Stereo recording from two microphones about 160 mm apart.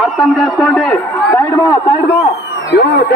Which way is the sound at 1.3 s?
20° left (ahead or behind).